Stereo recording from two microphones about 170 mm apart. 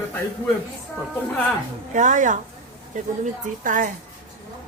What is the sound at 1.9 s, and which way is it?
A woman's voice, 45° right (ahead or behind).